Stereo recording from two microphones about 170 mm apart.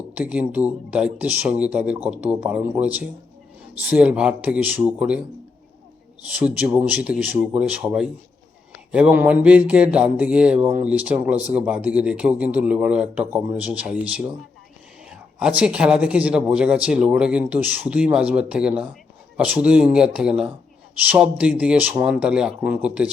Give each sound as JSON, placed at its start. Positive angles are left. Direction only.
{"t": 0.1, "sound": "speech", "side_deg": -10}
{"t": 6.2, "sound": "speech", "side_deg": -10}